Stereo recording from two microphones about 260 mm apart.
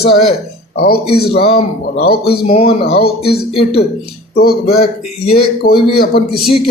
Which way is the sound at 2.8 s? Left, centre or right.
Left.